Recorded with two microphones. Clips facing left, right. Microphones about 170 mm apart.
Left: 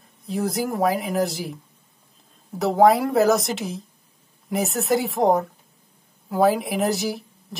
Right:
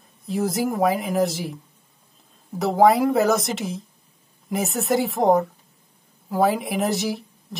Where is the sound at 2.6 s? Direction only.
Centre (ahead or behind).